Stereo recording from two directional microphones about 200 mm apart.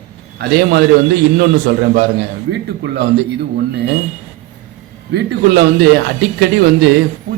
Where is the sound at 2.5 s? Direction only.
60° right (ahead or behind).